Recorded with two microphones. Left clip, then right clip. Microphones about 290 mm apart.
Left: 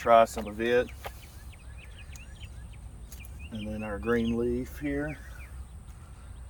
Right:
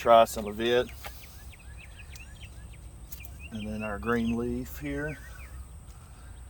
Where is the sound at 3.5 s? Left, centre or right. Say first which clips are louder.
Right 1 dB; centre.